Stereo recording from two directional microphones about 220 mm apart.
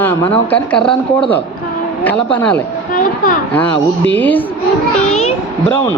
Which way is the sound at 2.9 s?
35° left (ahead or behind).